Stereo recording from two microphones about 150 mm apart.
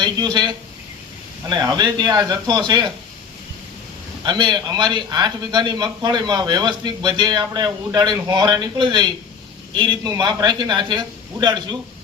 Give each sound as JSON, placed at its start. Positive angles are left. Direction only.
{"t": 0.0, "sound": "a man's voice", "side_deg": -30}
{"t": 4.2, "sound": "a man's voice", "side_deg": -30}